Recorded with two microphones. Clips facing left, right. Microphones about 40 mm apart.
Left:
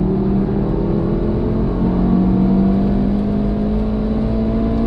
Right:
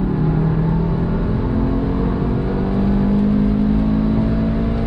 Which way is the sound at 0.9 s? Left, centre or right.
Centre.